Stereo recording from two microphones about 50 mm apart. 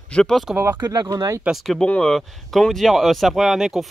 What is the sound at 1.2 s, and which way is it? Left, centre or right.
Speech, right.